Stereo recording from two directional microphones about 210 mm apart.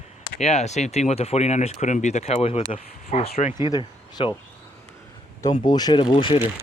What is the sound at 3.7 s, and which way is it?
Speech, 20° left (ahead or behind).